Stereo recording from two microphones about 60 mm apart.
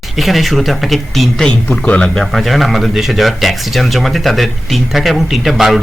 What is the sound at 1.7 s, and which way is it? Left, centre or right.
Speech, left.